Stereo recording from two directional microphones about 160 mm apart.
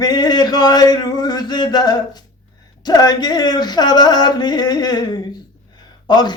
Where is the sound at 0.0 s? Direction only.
25° left (ahead or behind).